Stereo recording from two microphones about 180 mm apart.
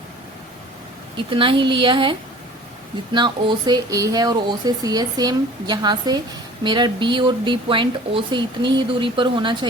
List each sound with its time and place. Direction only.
1.3 s speech: 30° right (ahead or behind)